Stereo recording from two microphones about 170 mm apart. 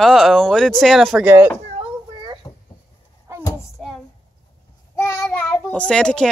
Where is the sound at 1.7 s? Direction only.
30° right (ahead or behind).